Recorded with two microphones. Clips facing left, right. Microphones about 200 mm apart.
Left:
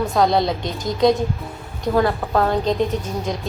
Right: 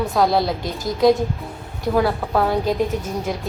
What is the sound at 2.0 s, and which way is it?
A woman's voice, 5° right (ahead or behind).